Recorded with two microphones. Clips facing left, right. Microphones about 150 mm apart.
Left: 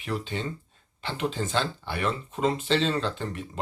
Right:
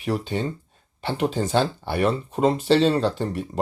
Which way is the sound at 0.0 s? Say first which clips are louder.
Right 6 dB; 45° right (ahead or behind).